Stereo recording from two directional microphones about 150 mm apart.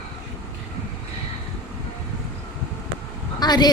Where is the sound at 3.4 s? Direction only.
25° left (ahead or behind).